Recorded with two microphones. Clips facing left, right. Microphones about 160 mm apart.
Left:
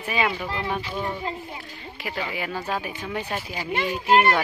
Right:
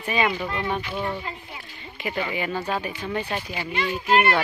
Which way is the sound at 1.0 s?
30° left (ahead or behind).